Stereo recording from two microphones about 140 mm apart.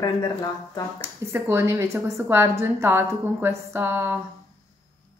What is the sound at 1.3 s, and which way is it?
A woman's voice, 20° right (ahead or behind).